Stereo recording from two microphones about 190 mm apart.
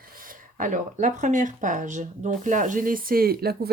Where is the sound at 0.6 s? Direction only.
40° right (ahead or behind).